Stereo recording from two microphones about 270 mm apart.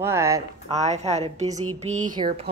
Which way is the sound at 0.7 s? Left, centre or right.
Right.